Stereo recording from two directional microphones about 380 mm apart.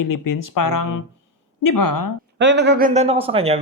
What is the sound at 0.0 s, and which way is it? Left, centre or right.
Speech, left.